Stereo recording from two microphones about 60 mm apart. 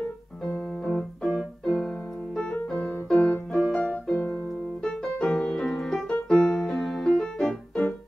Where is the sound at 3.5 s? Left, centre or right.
Centre.